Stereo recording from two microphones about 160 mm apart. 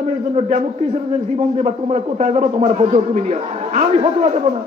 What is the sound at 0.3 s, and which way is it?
A man's voice, 45° right (ahead or behind).